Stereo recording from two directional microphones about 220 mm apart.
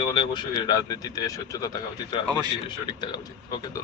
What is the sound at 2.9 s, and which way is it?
Speech, 20° left (ahead or behind).